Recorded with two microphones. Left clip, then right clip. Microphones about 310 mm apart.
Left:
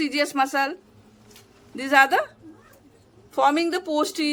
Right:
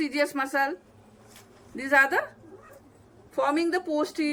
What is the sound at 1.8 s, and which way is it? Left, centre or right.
Speech, centre.